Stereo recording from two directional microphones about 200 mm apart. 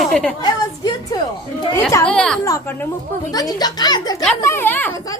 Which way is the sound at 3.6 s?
20° left (ahead or behind).